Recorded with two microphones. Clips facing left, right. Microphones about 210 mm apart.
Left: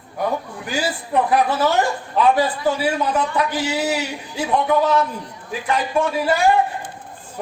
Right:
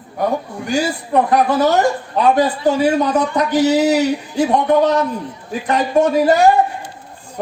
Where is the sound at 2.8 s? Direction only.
40° right (ahead or behind).